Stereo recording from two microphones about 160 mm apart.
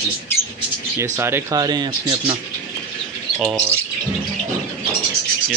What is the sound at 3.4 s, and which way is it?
Speech, 5° right (ahead or behind).